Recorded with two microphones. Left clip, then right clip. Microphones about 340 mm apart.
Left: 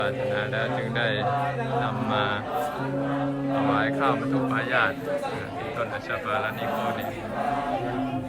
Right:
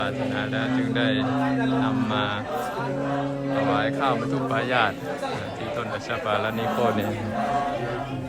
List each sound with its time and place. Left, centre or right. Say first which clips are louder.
0.8 s speech: right 2 dB; centre
3.8 s speech: even; centre